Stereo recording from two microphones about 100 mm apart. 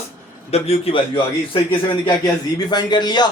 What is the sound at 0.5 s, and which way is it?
Speech, 85° left.